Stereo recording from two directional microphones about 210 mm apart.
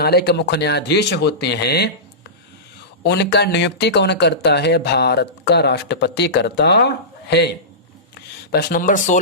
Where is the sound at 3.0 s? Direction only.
55° left (ahead or behind).